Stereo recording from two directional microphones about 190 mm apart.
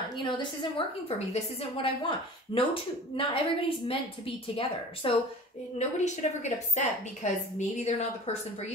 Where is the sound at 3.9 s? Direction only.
30° left (ahead or behind).